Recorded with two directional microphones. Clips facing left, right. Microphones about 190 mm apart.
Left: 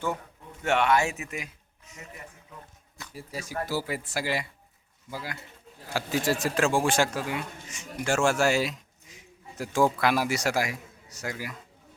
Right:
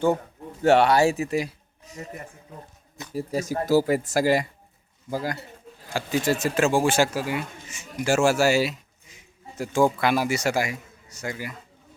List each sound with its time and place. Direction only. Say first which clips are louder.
0.6 s speech: right 7 dB; 35° right (ahead or behind)
5.9 s speech: right 3 dB; centre (ahead or behind)